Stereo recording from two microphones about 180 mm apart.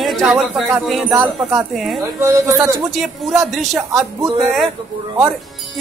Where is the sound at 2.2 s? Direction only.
15° right (ahead or behind).